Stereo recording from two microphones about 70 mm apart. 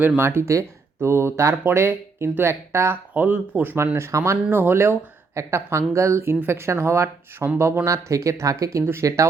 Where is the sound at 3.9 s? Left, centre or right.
Right.